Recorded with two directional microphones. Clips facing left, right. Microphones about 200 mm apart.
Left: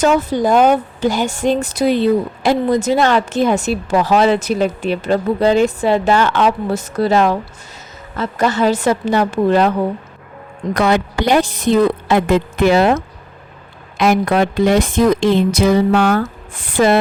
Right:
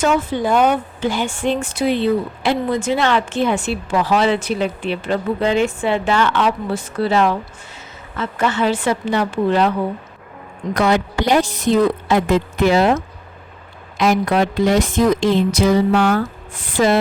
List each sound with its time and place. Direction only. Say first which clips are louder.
0.0 s speech: left 3 dB; 40° left (ahead or behind)
10.8 s a woman's voice: left 1 dB; 60° left (ahead or behind)